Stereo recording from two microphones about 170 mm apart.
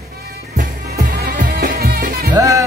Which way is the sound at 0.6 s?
60° right (ahead or behind).